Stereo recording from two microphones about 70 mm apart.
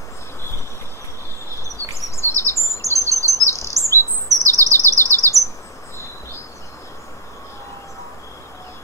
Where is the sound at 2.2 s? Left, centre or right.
Left.